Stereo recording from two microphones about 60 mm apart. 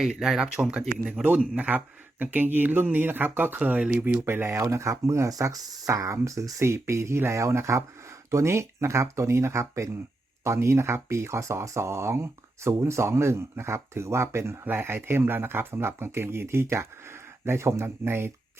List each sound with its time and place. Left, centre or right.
0.0 s speech: centre
1.2 s a man's voice: centre
1.5 s speech: right
3.6 s speech: right
4.3 s speech: right
4.5 s speech: right
5.3 s speech: right
14.6 s speech: right